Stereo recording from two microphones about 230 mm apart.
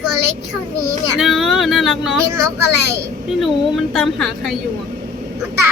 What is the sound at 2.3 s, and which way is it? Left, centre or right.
Speech, centre.